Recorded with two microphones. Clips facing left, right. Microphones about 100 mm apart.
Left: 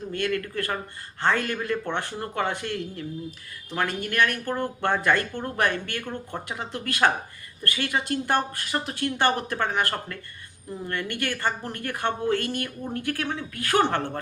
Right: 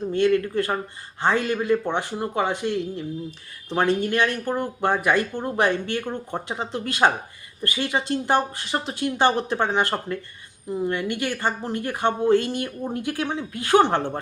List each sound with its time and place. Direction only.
0.1 s a woman's voice: 20° right (ahead or behind)